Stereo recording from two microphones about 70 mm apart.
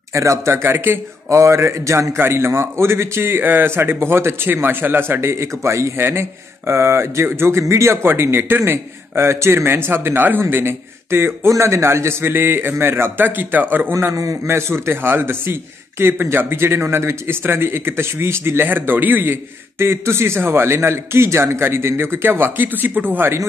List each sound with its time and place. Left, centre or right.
0.1 s speech: right
14.1 s speech: right